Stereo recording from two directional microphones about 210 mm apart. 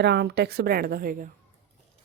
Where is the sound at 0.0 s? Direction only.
55° right (ahead or behind).